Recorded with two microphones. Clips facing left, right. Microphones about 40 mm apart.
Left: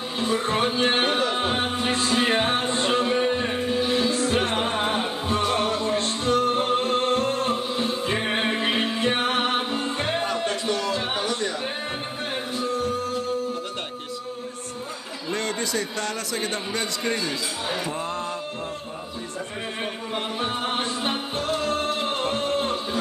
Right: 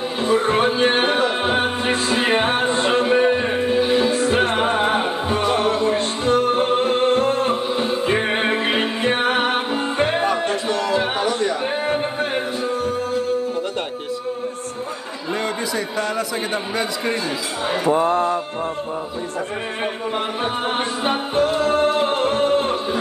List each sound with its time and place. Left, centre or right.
0.2 s music: centre
5.8 s music: centre
15.3 s a sound: centre
16.7 s a man's voice: centre
20.4 s music: centre